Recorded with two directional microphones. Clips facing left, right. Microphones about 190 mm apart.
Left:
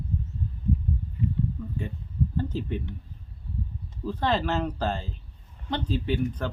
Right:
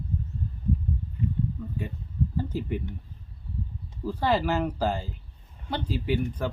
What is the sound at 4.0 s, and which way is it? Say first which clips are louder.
Speech: right 1 dB; 10° right (ahead or behind).